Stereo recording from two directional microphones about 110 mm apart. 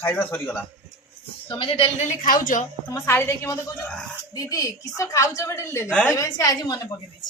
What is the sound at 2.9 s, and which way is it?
Speech, 35° left (ahead or behind).